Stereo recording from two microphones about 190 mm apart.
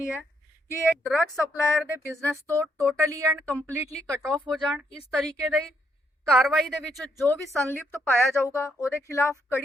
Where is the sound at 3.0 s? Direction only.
15° right (ahead or behind).